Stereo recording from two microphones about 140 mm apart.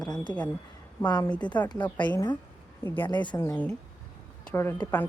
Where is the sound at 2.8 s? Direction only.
15° left (ahead or behind).